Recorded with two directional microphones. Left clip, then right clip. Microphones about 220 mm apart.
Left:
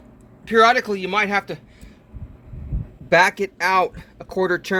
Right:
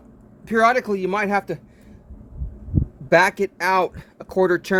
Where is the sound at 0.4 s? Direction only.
50° right (ahead or behind).